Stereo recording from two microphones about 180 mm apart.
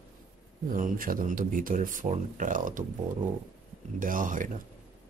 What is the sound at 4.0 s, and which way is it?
Speech, 50° right (ahead or behind).